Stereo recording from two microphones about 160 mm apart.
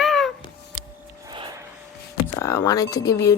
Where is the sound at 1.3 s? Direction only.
25° right (ahead or behind).